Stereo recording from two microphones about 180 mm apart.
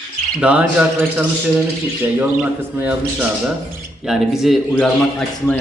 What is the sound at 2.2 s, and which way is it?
A man's voice, 5° right (ahead or behind).